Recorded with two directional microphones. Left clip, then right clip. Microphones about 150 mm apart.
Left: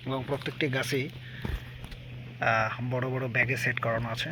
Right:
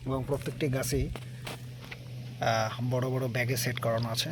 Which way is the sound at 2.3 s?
15° right (ahead or behind).